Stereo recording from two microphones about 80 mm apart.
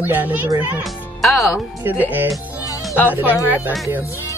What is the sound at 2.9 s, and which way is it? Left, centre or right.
Speech, centre.